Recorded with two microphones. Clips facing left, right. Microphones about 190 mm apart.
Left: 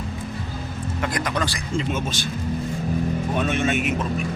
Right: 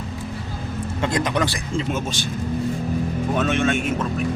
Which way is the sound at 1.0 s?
25° right (ahead or behind).